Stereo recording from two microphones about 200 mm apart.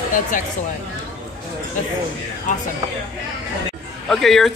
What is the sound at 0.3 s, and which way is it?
Speech, 40° left (ahead or behind).